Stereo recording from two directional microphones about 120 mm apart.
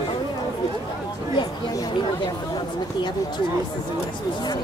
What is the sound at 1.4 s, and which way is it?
Chatter, 30° left (ahead or behind).